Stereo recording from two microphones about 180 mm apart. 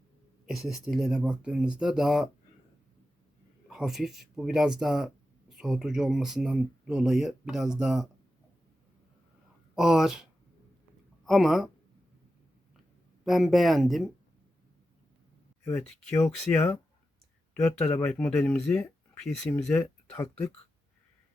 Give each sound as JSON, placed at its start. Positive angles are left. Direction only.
{"t": 0.4, "sound": "speech", "side_deg": 0}
{"t": 3.7, "sound": "speech", "side_deg": 0}
{"t": 9.7, "sound": "speech", "side_deg": -5}
{"t": 11.3, "sound": "speech", "side_deg": 0}
{"t": 13.2, "sound": "speech", "side_deg": 0}
{"t": 16.0, "sound": "speech", "side_deg": 5}
{"t": 19.7, "sound": "speech", "side_deg": 15}